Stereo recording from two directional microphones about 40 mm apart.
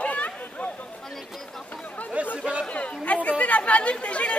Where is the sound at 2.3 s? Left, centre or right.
Right.